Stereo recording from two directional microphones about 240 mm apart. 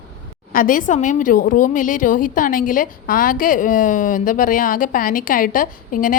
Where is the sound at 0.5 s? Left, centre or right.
Left.